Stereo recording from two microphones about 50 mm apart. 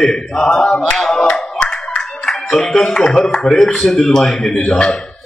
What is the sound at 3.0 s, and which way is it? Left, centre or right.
Speech, left.